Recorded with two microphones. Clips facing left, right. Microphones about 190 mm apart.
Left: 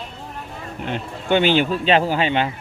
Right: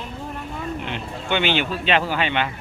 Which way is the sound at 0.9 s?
40° left (ahead or behind).